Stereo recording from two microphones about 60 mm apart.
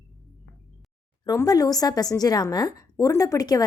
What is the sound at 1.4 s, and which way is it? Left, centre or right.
A woman's voice, left.